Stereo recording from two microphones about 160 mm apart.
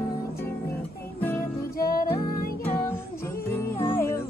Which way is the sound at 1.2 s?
15° left (ahead or behind).